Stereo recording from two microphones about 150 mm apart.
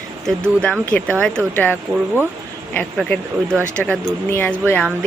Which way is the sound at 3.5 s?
15° right (ahead or behind).